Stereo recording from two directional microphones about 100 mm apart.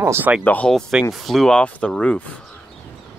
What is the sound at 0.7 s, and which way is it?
Speech, 5° left (ahead or behind).